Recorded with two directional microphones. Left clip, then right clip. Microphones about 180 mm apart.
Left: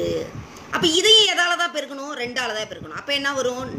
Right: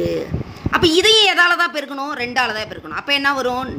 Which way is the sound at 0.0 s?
50° right (ahead or behind).